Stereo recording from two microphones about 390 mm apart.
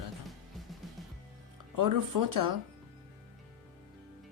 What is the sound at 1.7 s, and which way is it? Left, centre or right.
Speech, right.